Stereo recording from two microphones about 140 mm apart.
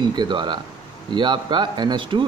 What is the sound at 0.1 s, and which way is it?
Speech, 30° right (ahead or behind).